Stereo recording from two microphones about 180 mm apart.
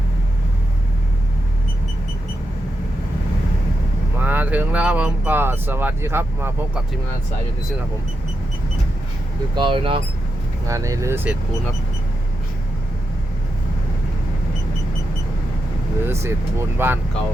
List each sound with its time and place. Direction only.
4.2 s speech: 10° right (ahead or behind)
9.6 s speech: 30° right (ahead or behind)
10.7 s speech: 20° right (ahead or behind)
16.0 s speech: 15° right (ahead or behind)